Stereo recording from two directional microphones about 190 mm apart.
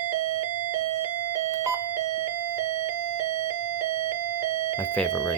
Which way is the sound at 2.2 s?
10° right (ahead or behind).